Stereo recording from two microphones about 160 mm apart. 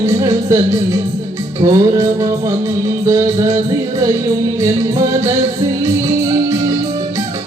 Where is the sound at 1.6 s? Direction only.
20° right (ahead or behind).